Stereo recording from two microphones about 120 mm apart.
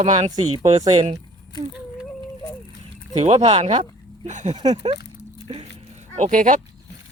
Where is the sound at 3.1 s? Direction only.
65° right (ahead or behind).